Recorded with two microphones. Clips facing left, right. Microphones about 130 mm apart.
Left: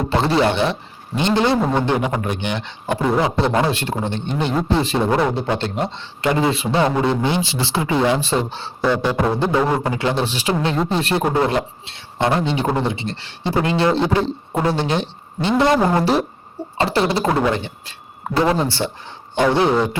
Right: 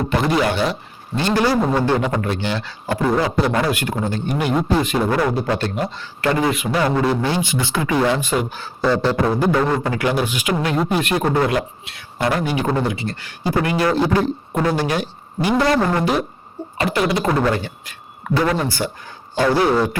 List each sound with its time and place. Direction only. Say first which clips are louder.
0.1 s a man's voice: left 2 dB; 30° left (ahead or behind)
1.5 s didgeridoo: even; centre (ahead or behind)
1.8 s a man's voice: right 1 dB; 20° left (ahead or behind)
9.0 s a man's voice: right 1 dB; 15° left (ahead or behind)
11.2 s speech: left 1 dB; 10° left (ahead or behind)
11.4 s a man's voice: even; 30° left (ahead or behind)
16.0 s a man's voice: left 2 dB; 30° left (ahead or behind)
17.2 s speech: even; 20° left (ahead or behind)